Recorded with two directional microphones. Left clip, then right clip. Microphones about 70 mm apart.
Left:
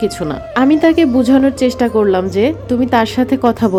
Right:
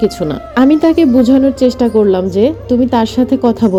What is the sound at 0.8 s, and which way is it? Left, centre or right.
Speech, right.